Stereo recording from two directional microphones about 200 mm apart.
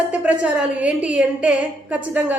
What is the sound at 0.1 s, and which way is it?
A woman's voice, 5° right (ahead or behind).